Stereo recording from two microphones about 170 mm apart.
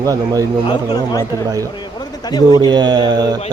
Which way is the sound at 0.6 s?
25° left (ahead or behind).